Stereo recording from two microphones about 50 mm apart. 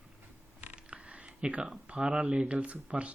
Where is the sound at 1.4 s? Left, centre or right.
Right.